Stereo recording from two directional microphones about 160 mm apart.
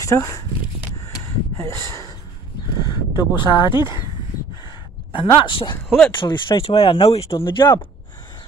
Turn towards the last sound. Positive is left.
turn(degrees=25)  # may be behind; listen again after turning